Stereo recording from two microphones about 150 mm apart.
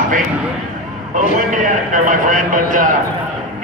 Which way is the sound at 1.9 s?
60° right (ahead or behind).